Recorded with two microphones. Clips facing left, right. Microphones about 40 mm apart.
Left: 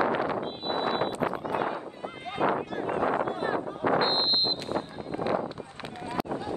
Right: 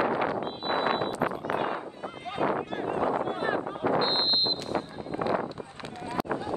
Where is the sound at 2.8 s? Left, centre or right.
Left.